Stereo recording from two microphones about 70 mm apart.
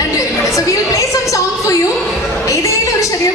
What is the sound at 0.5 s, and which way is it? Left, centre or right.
Music, left.